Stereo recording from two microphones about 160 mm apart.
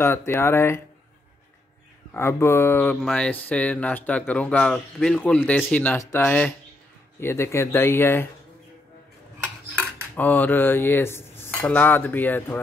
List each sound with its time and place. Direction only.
0.0 s speech: 15° left (ahead or behind)
2.1 s speech: 15° left (ahead or behind)
10.1 s speech: 10° left (ahead or behind)